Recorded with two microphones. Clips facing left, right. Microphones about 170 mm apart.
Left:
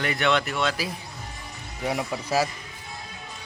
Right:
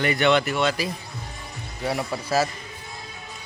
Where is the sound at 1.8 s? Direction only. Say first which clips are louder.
Right 1 dB; 15° left (ahead or behind).